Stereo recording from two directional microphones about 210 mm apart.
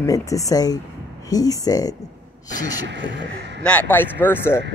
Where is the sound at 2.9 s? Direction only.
55° right (ahead or behind).